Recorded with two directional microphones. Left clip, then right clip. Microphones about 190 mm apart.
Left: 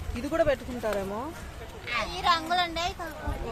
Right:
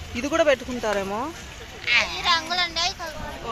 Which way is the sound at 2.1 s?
60° left (ahead or behind).